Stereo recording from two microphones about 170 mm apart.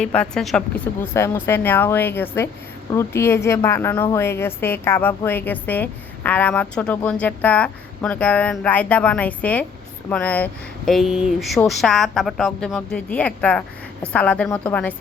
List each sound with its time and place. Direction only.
0.0 s a woman's voice: 5° left (ahead or behind)
1.1 s a woman's voice: 15° left (ahead or behind)